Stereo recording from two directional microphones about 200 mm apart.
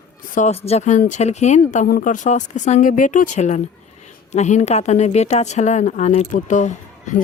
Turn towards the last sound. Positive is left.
turn(degrees=40)  # may be behind; listen again after turning